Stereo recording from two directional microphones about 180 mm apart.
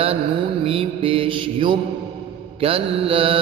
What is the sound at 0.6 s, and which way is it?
Mantra, 30° right (ahead or behind).